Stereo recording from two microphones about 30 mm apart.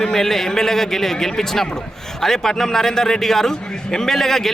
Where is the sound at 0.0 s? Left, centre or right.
Centre.